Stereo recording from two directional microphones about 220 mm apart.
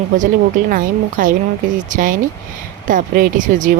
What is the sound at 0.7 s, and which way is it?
Speech, 35° right (ahead or behind).